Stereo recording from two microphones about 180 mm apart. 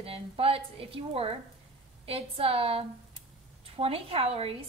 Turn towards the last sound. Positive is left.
turn(degrees=-35)  # may be behind; listen again after turning